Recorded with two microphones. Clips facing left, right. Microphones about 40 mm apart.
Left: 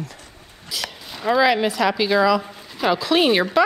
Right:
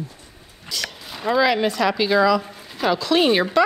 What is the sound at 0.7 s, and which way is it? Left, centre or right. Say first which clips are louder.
A woman's voice: even; centre.